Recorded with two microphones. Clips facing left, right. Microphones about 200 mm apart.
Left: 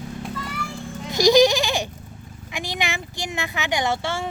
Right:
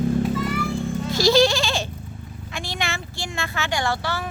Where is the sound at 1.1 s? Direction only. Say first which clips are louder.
Left 3 dB; 15° left (ahead or behind).